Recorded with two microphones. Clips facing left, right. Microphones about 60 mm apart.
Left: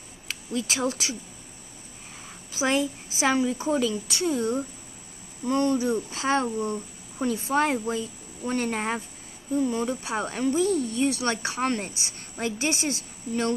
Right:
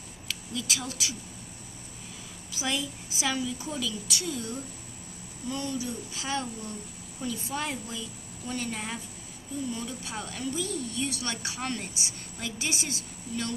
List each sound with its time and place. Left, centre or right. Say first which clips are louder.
0.3 s speech: left 4 dB; left
2.5 s a woman's voice: left 8 dB; left
5.5 s speech: left 10 dB; left